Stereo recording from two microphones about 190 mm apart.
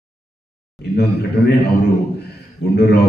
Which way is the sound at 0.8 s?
60° left (ahead or behind).